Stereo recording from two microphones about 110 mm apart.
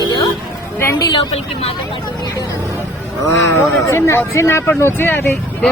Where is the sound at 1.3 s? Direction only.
65° left (ahead or behind).